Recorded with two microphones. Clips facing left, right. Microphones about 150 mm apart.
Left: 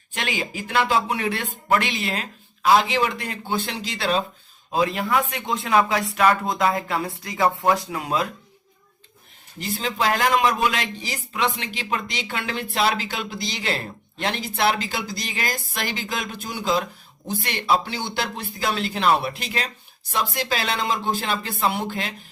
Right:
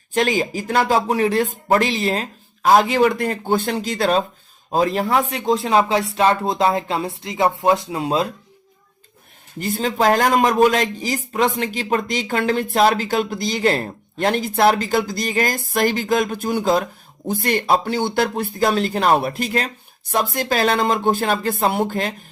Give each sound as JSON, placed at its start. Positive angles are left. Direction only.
{"t": 0.1, "sound": "speech", "side_deg": -40}
{"t": 9.6, "sound": "speech", "side_deg": -50}